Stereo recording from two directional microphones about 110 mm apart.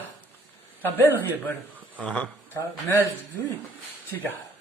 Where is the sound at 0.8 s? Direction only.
20° left (ahead or behind).